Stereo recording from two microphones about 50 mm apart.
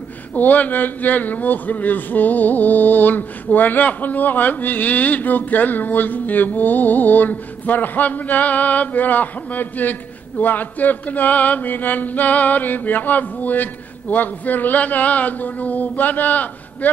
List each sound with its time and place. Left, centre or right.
0.3 s a man's voice: left